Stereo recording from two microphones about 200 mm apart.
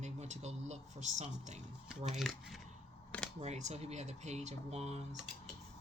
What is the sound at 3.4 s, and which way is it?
Speech, 35° right (ahead or behind).